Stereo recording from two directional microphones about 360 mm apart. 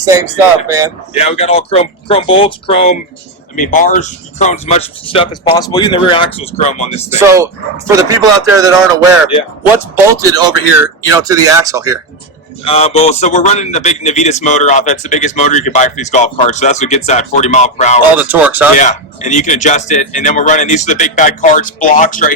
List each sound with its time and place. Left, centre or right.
0.0 s speech: centre
1.1 s speech: centre
7.2 s speech: centre
9.9 s speech: centre
12.6 s a man's voice: centre
18.2 s speech: centre
18.8 s a man's voice: centre